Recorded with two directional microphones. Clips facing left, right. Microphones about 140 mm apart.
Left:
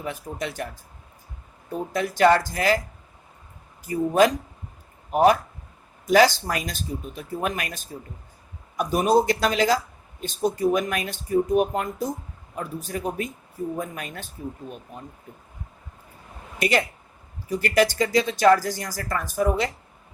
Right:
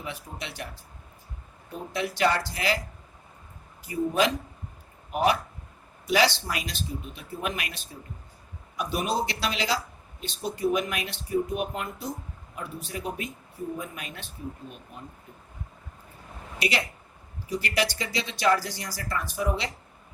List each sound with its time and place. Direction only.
0.0 s speech: 45° left (ahead or behind)
1.9 s speech: 45° left (ahead or behind)
3.8 s speech: 45° left (ahead or behind)
16.6 s speech: 50° left (ahead or behind)